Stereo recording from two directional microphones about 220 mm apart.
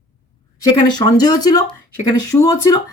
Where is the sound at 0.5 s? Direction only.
15° left (ahead or behind).